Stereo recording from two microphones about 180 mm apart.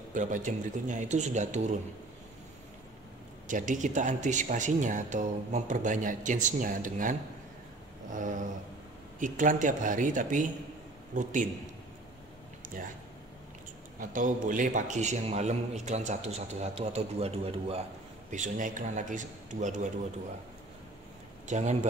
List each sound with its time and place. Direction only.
0.1 s a man's voice: 45° right (ahead or behind)
3.4 s speech: 45° right (ahead or behind)
12.7 s speech: 45° right (ahead or behind)
13.9 s a man's voice: 45° right (ahead or behind)
18.3 s speech: 45° right (ahead or behind)
21.5 s a man's voice: 40° right (ahead or behind)